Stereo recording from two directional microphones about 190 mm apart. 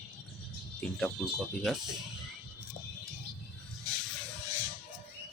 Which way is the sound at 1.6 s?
Centre (ahead or behind).